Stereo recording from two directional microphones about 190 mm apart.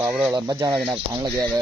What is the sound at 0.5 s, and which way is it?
Speech, 20° right (ahead or behind).